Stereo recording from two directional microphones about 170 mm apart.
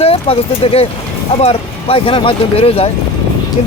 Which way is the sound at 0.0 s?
35° left (ahead or behind).